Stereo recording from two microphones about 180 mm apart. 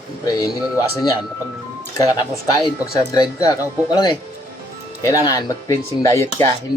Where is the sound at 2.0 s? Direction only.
20° left (ahead or behind).